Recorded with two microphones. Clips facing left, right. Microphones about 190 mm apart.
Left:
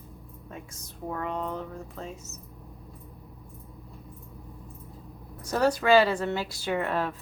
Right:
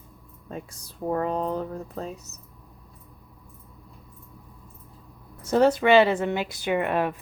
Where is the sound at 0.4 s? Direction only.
35° right (ahead or behind).